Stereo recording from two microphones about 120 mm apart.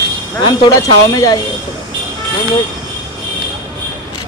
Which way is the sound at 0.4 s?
30° left (ahead or behind).